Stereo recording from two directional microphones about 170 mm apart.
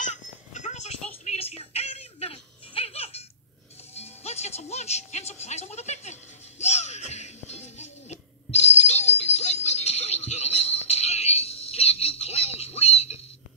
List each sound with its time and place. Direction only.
0.0 s music: 45° left (ahead or behind)